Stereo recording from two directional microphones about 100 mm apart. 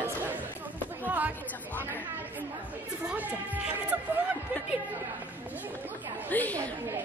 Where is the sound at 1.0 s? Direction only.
15° right (ahead or behind).